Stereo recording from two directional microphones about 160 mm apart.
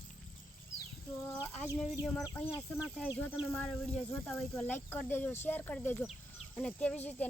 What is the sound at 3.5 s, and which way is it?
Speech, centre (ahead or behind).